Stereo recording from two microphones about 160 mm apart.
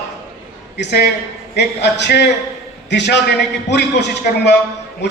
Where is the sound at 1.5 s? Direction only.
90° left.